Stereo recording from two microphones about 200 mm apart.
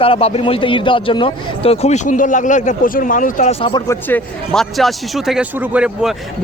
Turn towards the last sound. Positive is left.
turn(degrees=-5)  # may be behind; listen again after turning